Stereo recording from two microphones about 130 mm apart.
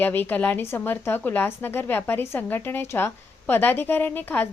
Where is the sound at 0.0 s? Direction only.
15° left (ahead or behind).